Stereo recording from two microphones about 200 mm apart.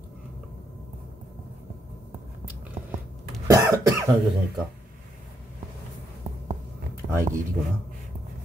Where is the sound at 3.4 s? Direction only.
15° right (ahead or behind).